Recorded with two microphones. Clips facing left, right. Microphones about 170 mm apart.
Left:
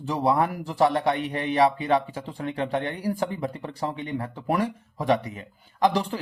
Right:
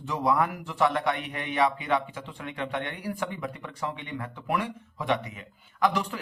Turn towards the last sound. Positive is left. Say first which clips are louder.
# left 4 dB
turn(degrees=30)  # may be behind; listen again after turning